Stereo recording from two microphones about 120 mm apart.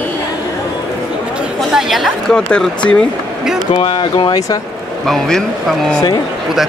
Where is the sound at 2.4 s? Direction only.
10° left (ahead or behind).